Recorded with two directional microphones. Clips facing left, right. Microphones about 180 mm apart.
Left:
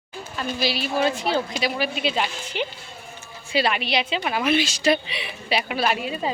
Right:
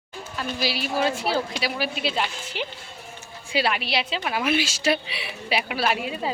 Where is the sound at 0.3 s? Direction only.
10° right (ahead or behind).